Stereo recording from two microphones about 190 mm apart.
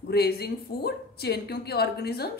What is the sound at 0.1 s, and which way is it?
Speech, 55° left (ahead or behind).